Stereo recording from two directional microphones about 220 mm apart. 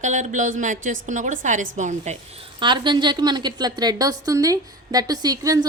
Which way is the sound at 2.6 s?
20° right (ahead or behind).